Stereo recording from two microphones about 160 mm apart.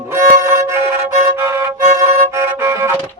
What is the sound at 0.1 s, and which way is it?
Music, 20° right (ahead or behind).